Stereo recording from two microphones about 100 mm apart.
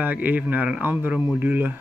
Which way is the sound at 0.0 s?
15° right (ahead or behind).